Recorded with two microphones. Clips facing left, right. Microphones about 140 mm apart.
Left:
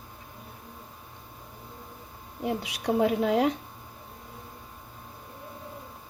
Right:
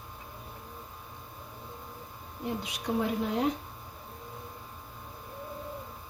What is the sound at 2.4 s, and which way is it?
A woman's voice, 90° left.